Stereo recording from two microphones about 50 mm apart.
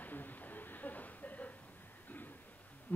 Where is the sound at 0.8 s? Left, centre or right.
Left.